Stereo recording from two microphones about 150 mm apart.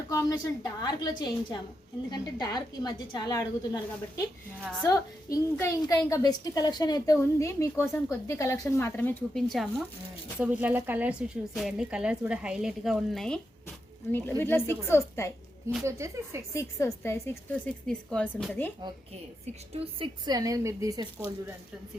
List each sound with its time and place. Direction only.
0.1 s a woman's voice: 20° left (ahead or behind)
4.8 s a woman's voice: 20° left (ahead or behind)
9.3 s a woman's voice: centre (ahead or behind)
10.3 s a woman's voice: 10° right (ahead or behind)
14.1 s a woman's voice: 15° left (ahead or behind)
15.8 s a woman's voice: 20° right (ahead or behind)
16.6 s a woman's voice: 20° left (ahead or behind)
19.7 s a woman's voice: 40° right (ahead or behind)
20.2 s a woman's voice: 25° right (ahead or behind)